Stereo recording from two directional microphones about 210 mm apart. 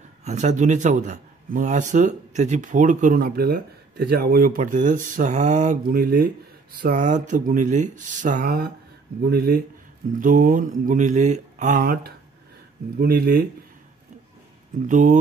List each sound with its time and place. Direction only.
0.2 s speech: 35° right (ahead or behind)
14.9 s speech: 35° right (ahead or behind)